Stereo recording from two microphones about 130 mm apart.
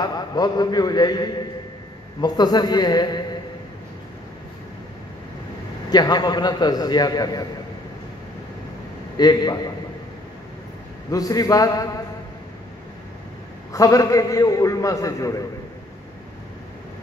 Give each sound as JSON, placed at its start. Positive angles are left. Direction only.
{"t": 0.0, "sound": "a man's voice", "side_deg": 30}
{"t": 5.9, "sound": "a man's voice", "side_deg": 30}
{"t": 9.1, "sound": "a man's voice", "side_deg": 30}
{"t": 11.1, "sound": "a man's voice", "side_deg": 25}
{"t": 13.7, "sound": "a man's voice", "side_deg": 25}